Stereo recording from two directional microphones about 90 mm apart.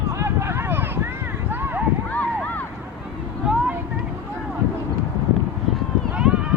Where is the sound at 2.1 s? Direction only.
20° left (ahead or behind).